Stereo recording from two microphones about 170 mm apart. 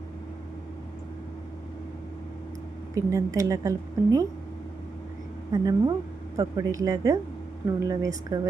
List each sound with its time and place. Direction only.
2.9 s a woman's voice: 20° right (ahead or behind)
5.5 s a woman's voice: 20° right (ahead or behind)